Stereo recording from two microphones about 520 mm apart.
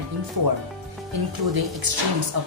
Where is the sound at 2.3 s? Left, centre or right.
Right.